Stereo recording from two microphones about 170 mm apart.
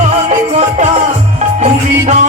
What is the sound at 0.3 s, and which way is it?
Music, 35° right (ahead or behind).